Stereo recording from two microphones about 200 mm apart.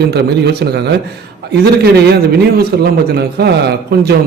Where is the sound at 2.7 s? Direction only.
50° right (ahead or behind).